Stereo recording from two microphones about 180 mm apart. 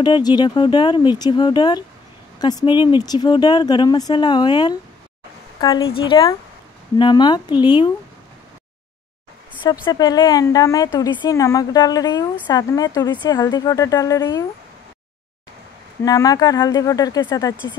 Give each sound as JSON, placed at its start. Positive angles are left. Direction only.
{"t": 0.0, "sound": "speech", "side_deg": 25}
{"t": 9.8, "sound": "speech", "side_deg": 20}
{"t": 16.0, "sound": "speech", "side_deg": 20}